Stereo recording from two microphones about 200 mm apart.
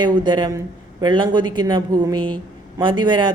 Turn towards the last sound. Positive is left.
turn(degrees=-25)  # may be behind; listen again after turning